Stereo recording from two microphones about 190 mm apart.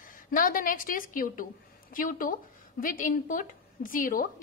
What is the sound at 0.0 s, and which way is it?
A woman's voice, 45° left (ahead or behind).